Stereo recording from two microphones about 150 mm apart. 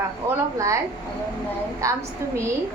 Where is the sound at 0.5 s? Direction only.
20° right (ahead or behind).